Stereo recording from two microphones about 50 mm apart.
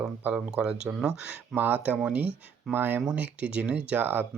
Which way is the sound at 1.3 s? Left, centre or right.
Right.